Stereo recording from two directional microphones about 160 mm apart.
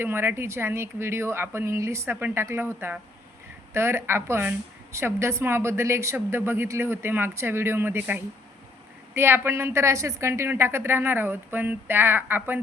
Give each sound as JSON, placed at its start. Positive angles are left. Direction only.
{"t": 0.0, "sound": "a woman's voice", "side_deg": -15}